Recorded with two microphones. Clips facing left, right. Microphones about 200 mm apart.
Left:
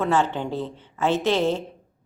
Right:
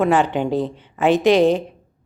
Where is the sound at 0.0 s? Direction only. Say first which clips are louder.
Right 5 dB; 15° right (ahead or behind).